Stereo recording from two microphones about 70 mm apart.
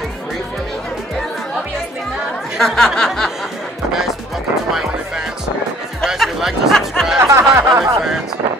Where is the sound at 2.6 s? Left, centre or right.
Centre.